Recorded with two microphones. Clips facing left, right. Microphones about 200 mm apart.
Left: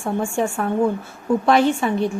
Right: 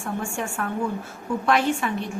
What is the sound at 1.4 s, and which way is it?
Speech, 30° left (ahead or behind).